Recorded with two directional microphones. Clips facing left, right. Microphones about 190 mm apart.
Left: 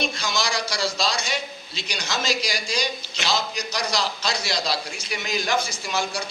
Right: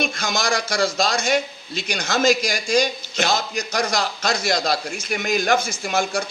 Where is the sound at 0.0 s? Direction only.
50° right (ahead or behind).